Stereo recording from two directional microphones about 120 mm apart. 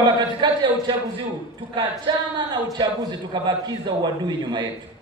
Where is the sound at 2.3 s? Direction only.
40° right (ahead or behind).